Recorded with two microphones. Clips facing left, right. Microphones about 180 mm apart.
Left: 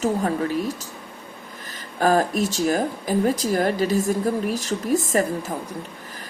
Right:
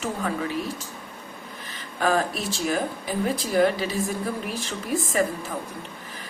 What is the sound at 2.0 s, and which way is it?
Speech, 45° left (ahead or behind).